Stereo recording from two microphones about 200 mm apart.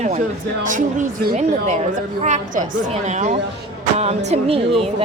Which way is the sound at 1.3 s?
40° right (ahead or behind).